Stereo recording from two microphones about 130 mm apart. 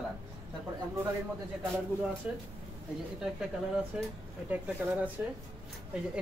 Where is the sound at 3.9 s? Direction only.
5° right (ahead or behind).